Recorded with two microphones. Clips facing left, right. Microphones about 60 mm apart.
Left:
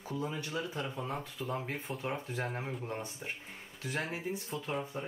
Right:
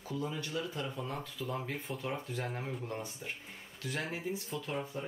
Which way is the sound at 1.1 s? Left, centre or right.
Left.